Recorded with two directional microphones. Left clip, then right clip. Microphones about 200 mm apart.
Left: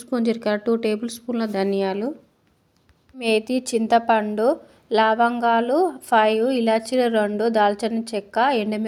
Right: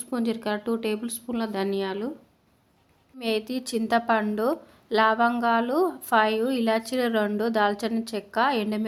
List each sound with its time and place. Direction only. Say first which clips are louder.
0.0 s speech: left 6 dB; 20° left (ahead or behind)
3.2 s a woman's voice: left 7 dB; 20° left (ahead or behind)